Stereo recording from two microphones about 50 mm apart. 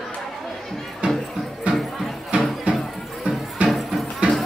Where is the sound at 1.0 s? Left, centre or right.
Right.